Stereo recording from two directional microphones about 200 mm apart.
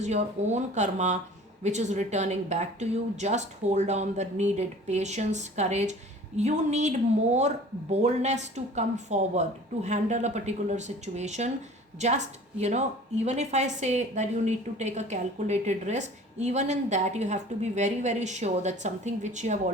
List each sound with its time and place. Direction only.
0.0 s speech: 35° right (ahead or behind)